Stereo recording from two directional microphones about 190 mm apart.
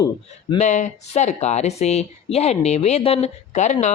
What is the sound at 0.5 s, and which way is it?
Speech, 40° left (ahead or behind).